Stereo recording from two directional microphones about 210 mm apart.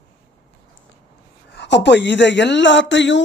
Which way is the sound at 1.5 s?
55° left (ahead or behind).